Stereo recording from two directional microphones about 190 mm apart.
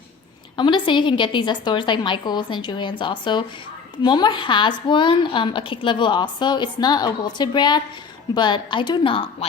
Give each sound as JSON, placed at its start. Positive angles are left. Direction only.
{"t": 0.5, "sound": "a woman's voice", "side_deg": 25}